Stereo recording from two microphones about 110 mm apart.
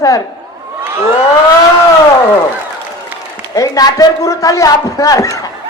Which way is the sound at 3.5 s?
35° left (ahead or behind).